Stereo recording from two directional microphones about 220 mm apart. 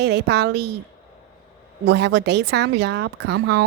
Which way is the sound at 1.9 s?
50° right (ahead or behind).